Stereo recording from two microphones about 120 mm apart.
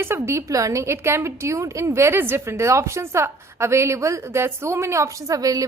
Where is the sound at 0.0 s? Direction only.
20° right (ahead or behind).